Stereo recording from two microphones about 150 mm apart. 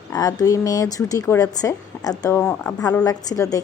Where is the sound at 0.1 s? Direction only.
25° left (ahead or behind).